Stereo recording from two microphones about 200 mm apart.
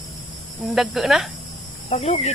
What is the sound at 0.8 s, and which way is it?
Speech, centre (ahead or behind).